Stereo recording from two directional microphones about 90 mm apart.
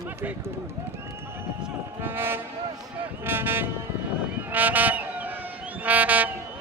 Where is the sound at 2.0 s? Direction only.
25° right (ahead or behind).